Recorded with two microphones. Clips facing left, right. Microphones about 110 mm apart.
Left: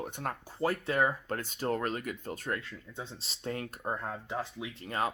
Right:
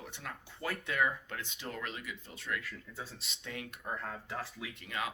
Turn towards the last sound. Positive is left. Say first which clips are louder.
# left 6 dB
turn(degrees=40)  # may be behind; listen again after turning